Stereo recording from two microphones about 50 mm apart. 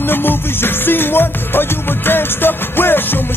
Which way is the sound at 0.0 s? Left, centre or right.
Left.